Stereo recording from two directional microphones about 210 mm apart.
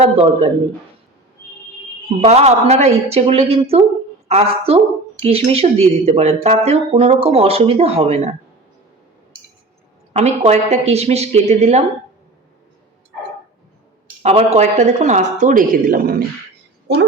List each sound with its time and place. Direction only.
0.0 s speech: 30° right (ahead or behind)
2.2 s speech: 30° right (ahead or behind)
10.1 s speech: 30° right (ahead or behind)
14.2 s speech: 30° right (ahead or behind)